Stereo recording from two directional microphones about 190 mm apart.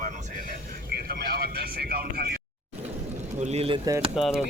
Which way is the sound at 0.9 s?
55° right (ahead or behind).